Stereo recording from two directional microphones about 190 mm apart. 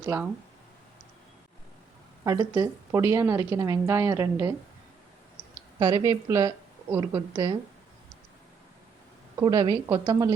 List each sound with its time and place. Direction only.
0.0 s speech: 10° right (ahead or behind)
2.2 s a woman's voice: 15° right (ahead or behind)
5.8 s a woman's voice: 20° right (ahead or behind)
9.4 s a woman's voice: 20° right (ahead or behind)